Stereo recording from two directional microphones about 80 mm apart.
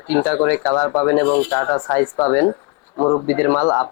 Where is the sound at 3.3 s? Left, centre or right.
Centre.